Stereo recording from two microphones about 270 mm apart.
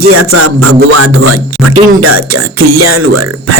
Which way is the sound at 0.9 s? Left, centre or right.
Right.